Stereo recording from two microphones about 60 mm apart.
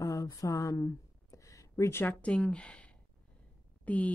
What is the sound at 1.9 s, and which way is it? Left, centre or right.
Speech, left.